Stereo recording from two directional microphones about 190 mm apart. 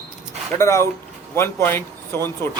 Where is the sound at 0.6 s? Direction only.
15° left (ahead or behind).